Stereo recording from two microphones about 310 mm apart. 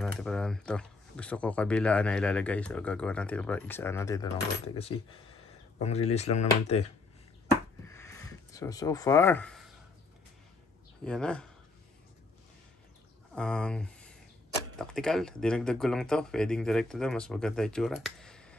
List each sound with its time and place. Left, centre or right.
0.0 s speech: centre
5.8 s speech: centre
7.9 s a sound: centre
11.1 s speech: centre
13.3 s speech: centre